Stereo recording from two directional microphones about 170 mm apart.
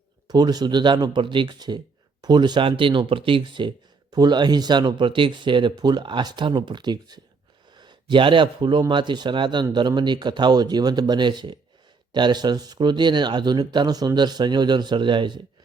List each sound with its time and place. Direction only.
0.3 s speech: 25° right (ahead or behind)